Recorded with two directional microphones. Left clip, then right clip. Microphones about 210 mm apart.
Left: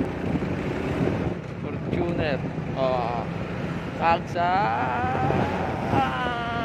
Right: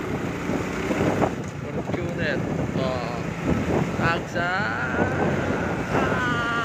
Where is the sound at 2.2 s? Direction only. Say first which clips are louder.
Right 2 dB; 20° left (ahead or behind).